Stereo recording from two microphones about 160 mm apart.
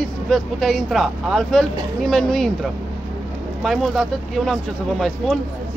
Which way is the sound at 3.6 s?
Centre (ahead or behind).